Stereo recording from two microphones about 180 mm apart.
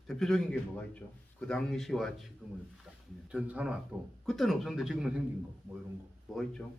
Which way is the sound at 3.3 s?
5° right (ahead or behind).